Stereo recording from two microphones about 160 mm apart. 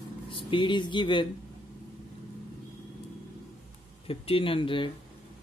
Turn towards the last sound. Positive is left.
turn(degrees=30)  # may be behind; listen again after turning